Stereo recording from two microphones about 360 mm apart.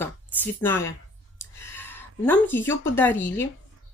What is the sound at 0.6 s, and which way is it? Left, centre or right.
Speech, centre.